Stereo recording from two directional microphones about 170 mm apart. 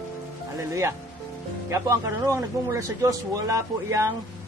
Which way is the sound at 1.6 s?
15° right (ahead or behind).